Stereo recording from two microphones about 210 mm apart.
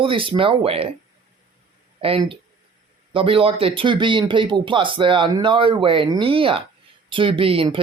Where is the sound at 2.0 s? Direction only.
25° right (ahead or behind).